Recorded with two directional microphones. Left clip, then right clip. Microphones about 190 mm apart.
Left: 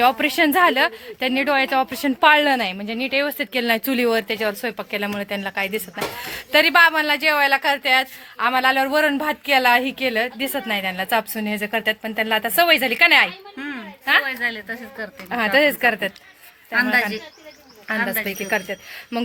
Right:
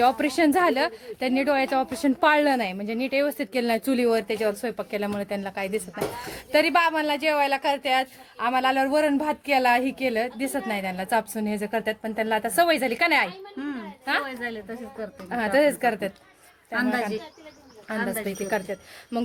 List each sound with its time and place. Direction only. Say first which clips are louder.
0.0 s a woman's voice: left 4 dB; 5° right (ahead or behind)
14.3 s speech: left 8 dB; 25° right (ahead or behind)
15.0 s a woman's voice: left 5 dB; 5° left (ahead or behind)